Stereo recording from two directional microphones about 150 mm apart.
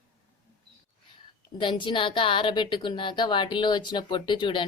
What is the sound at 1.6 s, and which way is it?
A woman's voice, 35° left (ahead or behind).